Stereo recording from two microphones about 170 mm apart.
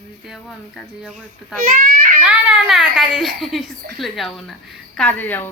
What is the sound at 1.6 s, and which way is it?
Speech, 55° right (ahead or behind).